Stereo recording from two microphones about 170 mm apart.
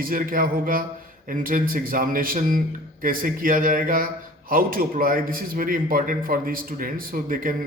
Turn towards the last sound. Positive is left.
turn(degrees=-55)  # may be behind; listen again after turning